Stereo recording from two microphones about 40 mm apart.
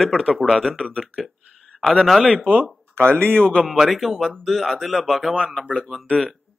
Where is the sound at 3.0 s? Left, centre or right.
Left.